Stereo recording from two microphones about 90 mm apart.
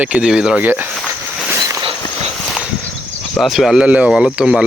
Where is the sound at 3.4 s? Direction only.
Centre (ahead or behind).